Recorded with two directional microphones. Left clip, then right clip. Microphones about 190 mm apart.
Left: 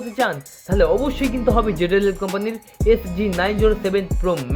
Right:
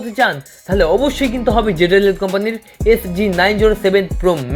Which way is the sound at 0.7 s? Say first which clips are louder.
Right 4 dB; 10° right (ahead or behind).